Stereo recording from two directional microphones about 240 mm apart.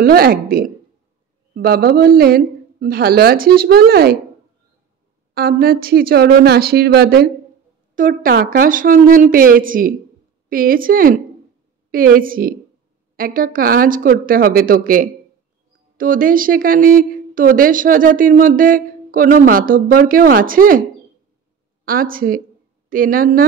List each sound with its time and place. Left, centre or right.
0.0 s a woman's voice: right
5.3 s a woman's voice: right
21.8 s a woman's voice: right